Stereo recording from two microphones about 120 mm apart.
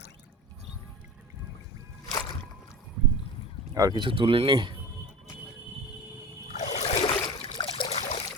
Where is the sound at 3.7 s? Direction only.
30° right (ahead or behind).